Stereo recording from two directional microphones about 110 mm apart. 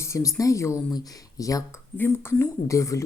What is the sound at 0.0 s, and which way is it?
Speech, 30° left (ahead or behind).